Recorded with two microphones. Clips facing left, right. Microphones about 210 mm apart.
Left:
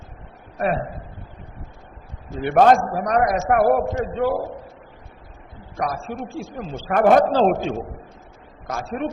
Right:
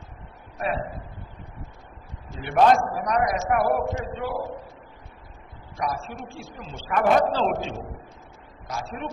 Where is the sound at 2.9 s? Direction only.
45° left (ahead or behind).